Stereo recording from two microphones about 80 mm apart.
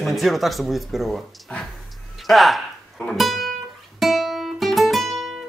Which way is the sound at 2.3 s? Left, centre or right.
Centre.